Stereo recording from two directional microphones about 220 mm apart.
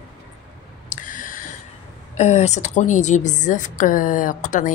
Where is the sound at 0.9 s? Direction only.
35° left (ahead or behind).